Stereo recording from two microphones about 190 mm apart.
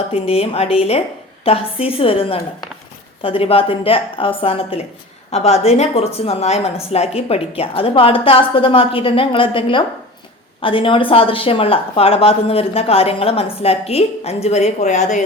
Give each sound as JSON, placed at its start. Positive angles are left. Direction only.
{"t": 0.1, "sound": "a woman's voice", "side_deg": 30}